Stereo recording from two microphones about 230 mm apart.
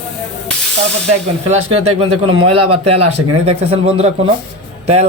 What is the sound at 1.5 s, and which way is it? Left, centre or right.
Speech, right.